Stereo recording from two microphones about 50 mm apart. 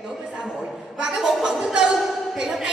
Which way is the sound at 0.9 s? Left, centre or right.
Centre.